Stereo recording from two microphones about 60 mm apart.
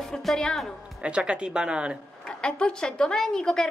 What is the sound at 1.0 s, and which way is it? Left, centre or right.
Speech, centre.